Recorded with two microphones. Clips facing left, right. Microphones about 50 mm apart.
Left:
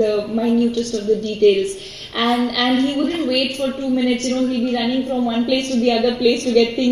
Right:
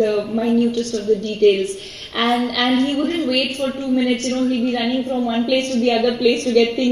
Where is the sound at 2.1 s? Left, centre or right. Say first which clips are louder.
Even; right.